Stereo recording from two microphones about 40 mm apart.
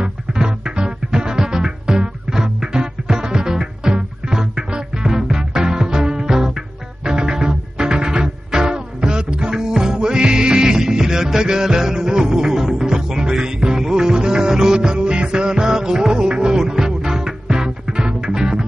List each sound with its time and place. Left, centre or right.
0.0 s music: centre